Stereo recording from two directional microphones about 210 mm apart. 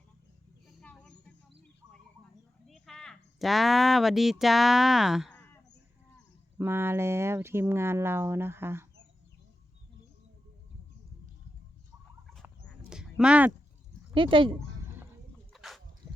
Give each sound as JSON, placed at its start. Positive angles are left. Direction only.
{"t": 0.8, "sound": "a sound", "side_deg": 5}
{"t": 2.6, "sound": "speech", "side_deg": 0}
{"t": 6.6, "sound": "speech", "side_deg": -10}
{"t": 12.9, "sound": "a sound", "side_deg": -5}
{"t": 14.1, "sound": "speech", "side_deg": -25}
{"t": 15.5, "sound": "dog", "side_deg": 0}